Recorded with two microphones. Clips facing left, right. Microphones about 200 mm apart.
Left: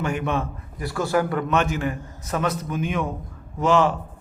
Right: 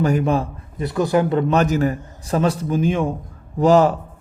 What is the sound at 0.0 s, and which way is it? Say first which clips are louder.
Speech: right 6 dB; 35° right (ahead or behind).